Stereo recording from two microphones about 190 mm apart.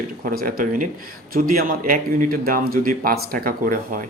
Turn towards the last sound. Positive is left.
turn(degrees=-45)  # may be behind; listen again after turning